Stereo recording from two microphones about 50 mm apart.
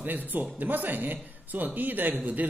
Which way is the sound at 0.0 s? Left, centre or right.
Right.